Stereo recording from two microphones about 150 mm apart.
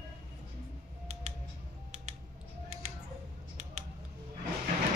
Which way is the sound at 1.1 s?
50° right (ahead or behind).